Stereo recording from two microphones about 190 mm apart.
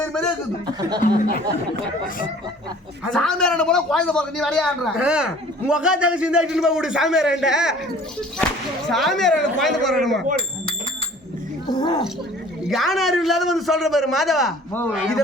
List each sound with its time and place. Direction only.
0.0 s a man's voice: 5° left (ahead or behind)
0.8 s speech: 20° right (ahead or behind)
3.0 s a man's voice: 5° left (ahead or behind)
8.9 s a man's voice: centre (ahead or behind)
11.7 s speech: 20° left (ahead or behind)
12.6 s a man's voice: centre (ahead or behind)
14.7 s speech: 10° left (ahead or behind)